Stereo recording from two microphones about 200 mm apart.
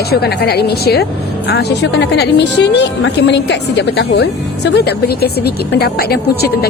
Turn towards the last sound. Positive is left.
turn(degrees=55)  # may be behind; listen again after turning